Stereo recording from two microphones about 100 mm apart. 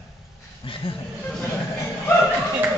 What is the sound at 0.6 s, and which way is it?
Speech, 65° left (ahead or behind).